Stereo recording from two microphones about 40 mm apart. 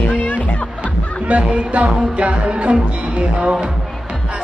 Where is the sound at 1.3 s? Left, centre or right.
Right.